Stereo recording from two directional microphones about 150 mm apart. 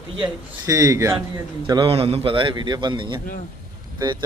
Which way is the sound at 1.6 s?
30° right (ahead or behind).